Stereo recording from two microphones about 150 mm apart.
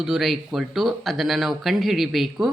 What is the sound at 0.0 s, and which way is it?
Speech, centre (ahead or behind).